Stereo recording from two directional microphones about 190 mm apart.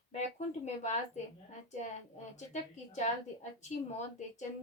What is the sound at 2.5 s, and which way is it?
A woman's voice, 40° left (ahead or behind).